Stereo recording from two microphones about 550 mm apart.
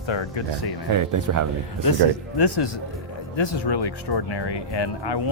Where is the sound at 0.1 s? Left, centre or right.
Left.